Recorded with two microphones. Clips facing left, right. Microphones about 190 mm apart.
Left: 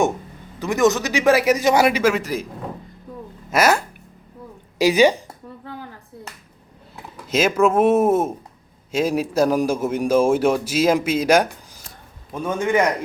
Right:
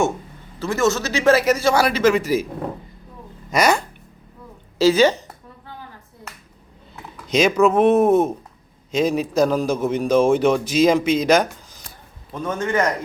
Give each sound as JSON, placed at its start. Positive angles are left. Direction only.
{"t": 0.6, "sound": "a man's voice", "side_deg": 15}
{"t": 3.5, "sound": "speech", "side_deg": 5}
{"t": 4.8, "sound": "a man's voice", "side_deg": 15}
{"t": 7.3, "sound": "a man's voice", "side_deg": 5}